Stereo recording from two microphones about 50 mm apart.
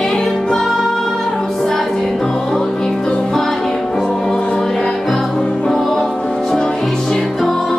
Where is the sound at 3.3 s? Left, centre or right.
Centre.